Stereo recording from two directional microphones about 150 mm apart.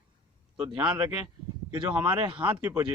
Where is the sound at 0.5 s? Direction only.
5° right (ahead or behind).